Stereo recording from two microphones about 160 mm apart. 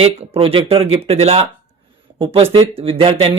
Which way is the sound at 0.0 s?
40° right (ahead or behind).